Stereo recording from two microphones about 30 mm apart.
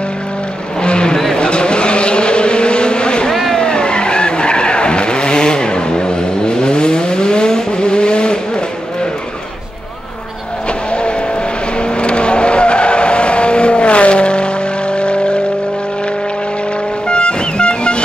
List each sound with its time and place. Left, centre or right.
0.8 s vehicle: left
1.1 s a sound: centre
1.4 s vehicle: left
10.9 s vehicle: left
17.1 s music: left